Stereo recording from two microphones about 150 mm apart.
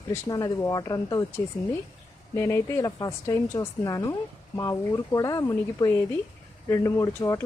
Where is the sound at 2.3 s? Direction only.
15° left (ahead or behind).